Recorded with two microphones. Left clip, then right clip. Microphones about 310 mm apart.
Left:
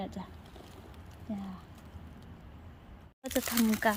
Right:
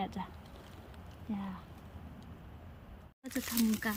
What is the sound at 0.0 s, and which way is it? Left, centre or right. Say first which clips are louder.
Speech: right 2 dB; centre.